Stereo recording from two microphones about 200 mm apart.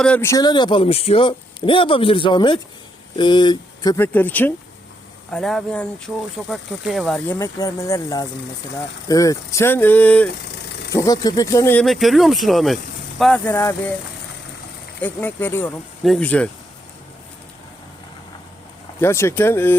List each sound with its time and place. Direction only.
0.0 s speech: 10° left (ahead or behind)
7.3 s speech: 15° left (ahead or behind)
15.0 s speech: 10° left (ahead or behind)
18.9 s speech: 10° left (ahead or behind)